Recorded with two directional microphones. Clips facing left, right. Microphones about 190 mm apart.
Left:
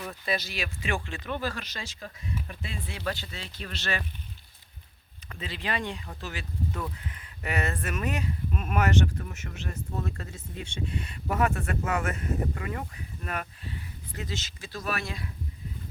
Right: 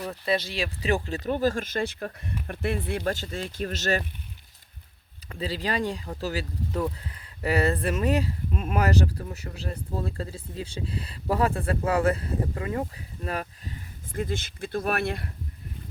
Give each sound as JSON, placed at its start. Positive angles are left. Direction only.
{"t": 0.0, "sound": "speech", "side_deg": -30}
{"t": 5.3, "sound": "speech", "side_deg": -35}